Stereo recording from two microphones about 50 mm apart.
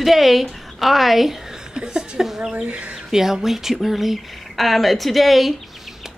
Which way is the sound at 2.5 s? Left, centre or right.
Right.